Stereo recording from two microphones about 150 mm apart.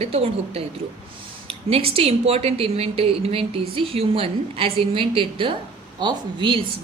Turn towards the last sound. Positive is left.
turn(degrees=-30)  # may be behind; listen again after turning